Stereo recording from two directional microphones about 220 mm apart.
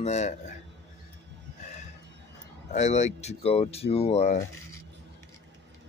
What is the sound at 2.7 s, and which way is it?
Speech, 30° left (ahead or behind).